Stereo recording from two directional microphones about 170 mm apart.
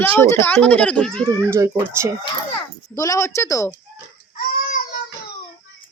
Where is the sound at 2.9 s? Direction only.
20° left (ahead or behind).